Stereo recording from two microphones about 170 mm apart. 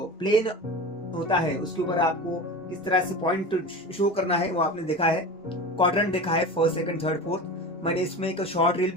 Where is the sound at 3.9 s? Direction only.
35° left (ahead or behind).